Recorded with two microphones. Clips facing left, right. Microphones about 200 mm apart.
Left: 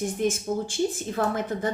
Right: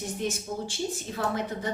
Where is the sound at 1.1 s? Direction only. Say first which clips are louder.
Left 2 dB; 50° left (ahead or behind).